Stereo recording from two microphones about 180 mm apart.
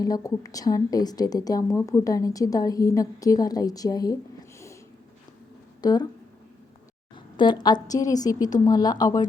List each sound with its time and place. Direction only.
0.0 s a woman's voice: 20° left (ahead or behind)
5.8 s a woman's voice: 20° left (ahead or behind)
7.3 s a woman's voice: 25° left (ahead or behind)